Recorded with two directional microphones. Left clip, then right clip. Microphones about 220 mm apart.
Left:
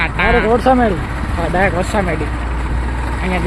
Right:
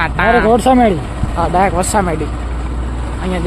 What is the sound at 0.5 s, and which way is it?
Speech, 45° right (ahead or behind).